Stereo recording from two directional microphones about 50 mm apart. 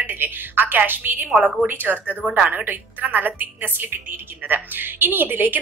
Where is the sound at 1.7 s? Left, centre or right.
Right.